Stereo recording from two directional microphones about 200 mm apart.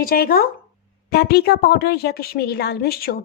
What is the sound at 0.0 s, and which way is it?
Speech, 50° left (ahead or behind).